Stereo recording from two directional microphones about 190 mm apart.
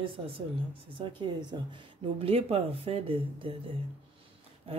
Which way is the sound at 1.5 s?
20° right (ahead or behind).